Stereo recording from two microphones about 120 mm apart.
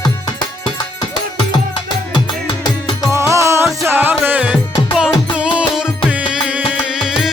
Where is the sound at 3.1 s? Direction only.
25° right (ahead or behind).